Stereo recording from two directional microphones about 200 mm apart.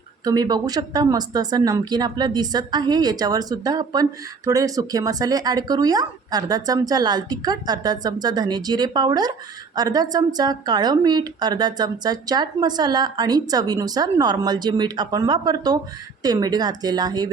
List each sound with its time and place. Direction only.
0.3 s a woman's voice: 20° right (ahead or behind)